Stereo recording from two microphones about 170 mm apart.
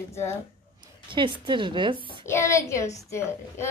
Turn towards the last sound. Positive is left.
turn(degrees=15)  # may be behind; listen again after turning